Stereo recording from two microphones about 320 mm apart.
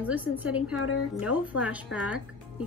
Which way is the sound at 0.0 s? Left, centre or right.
Centre.